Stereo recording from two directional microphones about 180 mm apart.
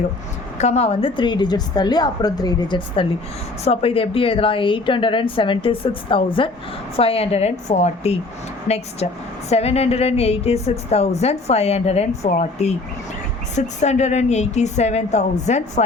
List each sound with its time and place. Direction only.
0.6 s a woman's voice: 35° left (ahead or behind)